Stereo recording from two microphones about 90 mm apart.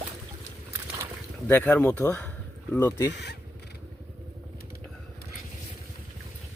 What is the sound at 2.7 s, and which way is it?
Speech, 30° left (ahead or behind).